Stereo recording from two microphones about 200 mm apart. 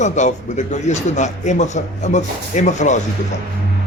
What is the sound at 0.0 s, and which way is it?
Speech, 35° left (ahead or behind).